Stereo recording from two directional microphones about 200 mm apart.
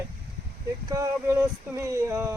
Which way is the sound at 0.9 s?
15° right (ahead or behind).